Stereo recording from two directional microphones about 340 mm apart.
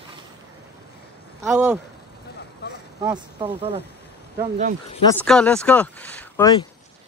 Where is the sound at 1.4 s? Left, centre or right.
Centre.